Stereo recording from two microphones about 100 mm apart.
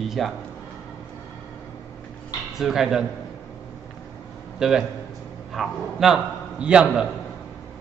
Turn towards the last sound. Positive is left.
turn(degrees=-10)  # may be behind; listen again after turning